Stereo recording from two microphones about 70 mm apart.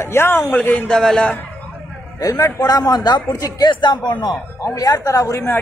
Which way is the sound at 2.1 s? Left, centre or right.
Left.